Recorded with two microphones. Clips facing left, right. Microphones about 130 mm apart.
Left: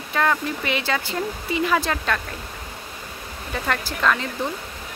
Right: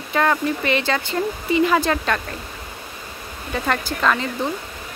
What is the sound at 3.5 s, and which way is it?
Speech, centre (ahead or behind).